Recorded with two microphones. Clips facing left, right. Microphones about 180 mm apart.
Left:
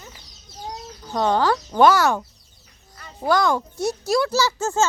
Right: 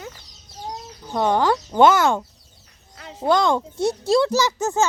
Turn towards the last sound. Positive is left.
turn(degrees=-15)  # may be behind; listen again after turning